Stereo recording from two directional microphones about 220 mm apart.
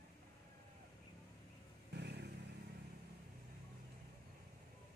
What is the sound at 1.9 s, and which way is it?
Vehicle, 50° right (ahead or behind).